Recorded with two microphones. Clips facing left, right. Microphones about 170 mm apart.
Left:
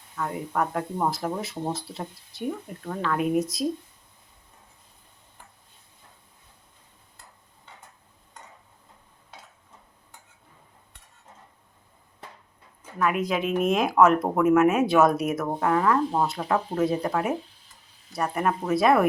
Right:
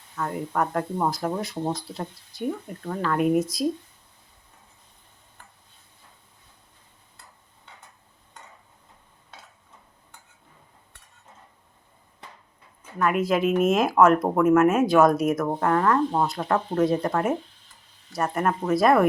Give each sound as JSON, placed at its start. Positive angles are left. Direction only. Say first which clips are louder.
{"t": 0.2, "sound": "speech", "louder": "right 1 dB", "side_deg": 0}
{"t": 13.0, "sound": "speech", "louder": "right 3 dB", "side_deg": 0}